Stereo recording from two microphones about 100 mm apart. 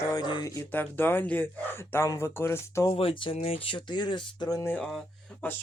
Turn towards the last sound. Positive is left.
turn(degrees=20)  # may be behind; listen again after turning